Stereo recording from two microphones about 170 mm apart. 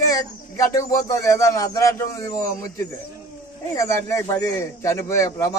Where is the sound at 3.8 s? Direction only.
15° left (ahead or behind).